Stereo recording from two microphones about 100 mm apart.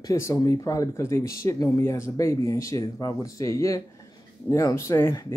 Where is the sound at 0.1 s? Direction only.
30° left (ahead or behind).